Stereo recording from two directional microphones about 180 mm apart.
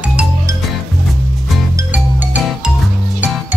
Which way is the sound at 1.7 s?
10° right (ahead or behind).